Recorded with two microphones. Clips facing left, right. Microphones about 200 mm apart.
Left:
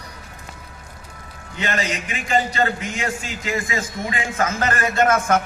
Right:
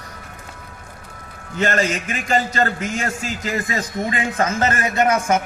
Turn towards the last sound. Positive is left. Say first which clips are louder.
# even
turn(degrees=-10)  # may be behind; listen again after turning